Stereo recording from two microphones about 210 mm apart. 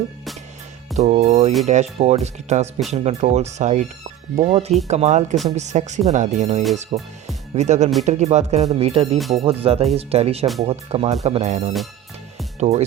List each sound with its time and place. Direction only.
0.9 s speech: 30° right (ahead or behind)
9.1 s speech: centre (ahead or behind)
9.4 s speech: 30° right (ahead or behind)